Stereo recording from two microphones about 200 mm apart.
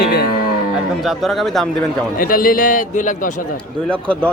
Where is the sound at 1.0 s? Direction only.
Centre (ahead or behind).